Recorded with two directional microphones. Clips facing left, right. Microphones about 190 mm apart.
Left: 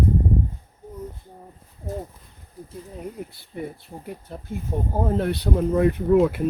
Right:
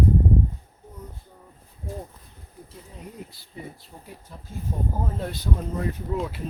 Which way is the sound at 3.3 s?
60° left (ahead or behind).